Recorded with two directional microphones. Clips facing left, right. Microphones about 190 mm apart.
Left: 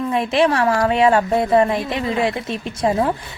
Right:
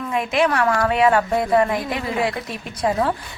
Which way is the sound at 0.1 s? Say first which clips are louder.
Left 2 dB; 30° left (ahead or behind).